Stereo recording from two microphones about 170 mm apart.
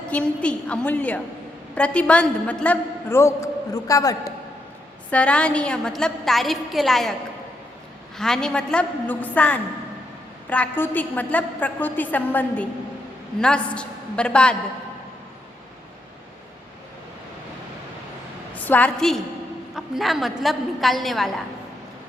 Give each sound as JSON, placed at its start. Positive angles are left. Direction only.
{"t": 0.1, "sound": "a man's voice", "side_deg": 5}
{"t": 5.1, "sound": "a woman's voice", "side_deg": 5}
{"t": 8.2, "sound": "a man's voice", "side_deg": 5}
{"t": 18.5, "sound": "a woman's voice", "side_deg": 10}